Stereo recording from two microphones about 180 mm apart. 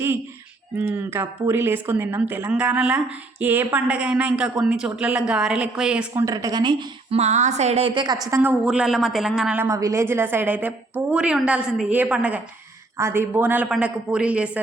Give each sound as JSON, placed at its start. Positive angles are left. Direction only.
{"t": 0.8, "sound": "a woman's voice", "side_deg": -10}
{"t": 6.2, "sound": "speech", "side_deg": -20}
{"t": 7.2, "sound": "a woman's voice", "side_deg": -40}
{"t": 8.4, "sound": "a woman's voice", "side_deg": -5}